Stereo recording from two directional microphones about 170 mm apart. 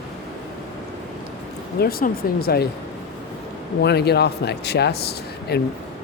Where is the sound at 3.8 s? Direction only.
75° left (ahead or behind).